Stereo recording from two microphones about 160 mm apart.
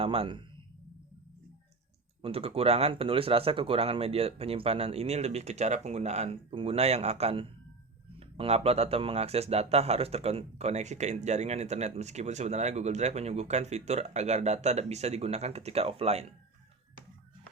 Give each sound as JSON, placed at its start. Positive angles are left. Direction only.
{"t": 0.0, "sound": "speech", "side_deg": -35}
{"t": 2.2, "sound": "speech", "side_deg": -35}